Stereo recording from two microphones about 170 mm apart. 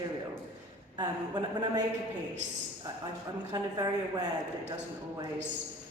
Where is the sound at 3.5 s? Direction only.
25° right (ahead or behind).